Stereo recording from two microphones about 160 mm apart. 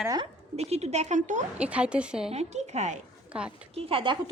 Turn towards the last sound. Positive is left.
turn(degrees=-30)  # may be behind; listen again after turning